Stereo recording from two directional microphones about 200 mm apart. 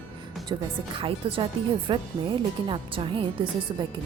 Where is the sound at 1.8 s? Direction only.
25° right (ahead or behind).